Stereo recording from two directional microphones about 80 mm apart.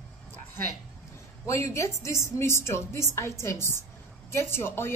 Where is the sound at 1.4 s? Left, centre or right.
Left.